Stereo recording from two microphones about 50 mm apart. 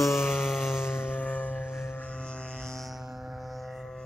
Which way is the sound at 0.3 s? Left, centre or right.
Centre.